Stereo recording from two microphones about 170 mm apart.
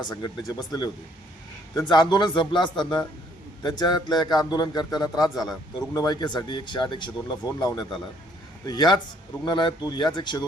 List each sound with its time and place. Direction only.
0.0 s a man's voice: 20° left (ahead or behind)
1.9 s a man's voice: 25° left (ahead or behind)